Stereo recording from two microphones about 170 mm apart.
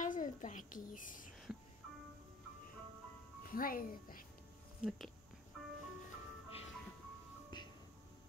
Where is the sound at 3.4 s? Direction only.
55° left (ahead or behind).